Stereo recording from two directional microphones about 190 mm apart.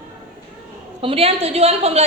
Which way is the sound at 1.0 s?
30° right (ahead or behind).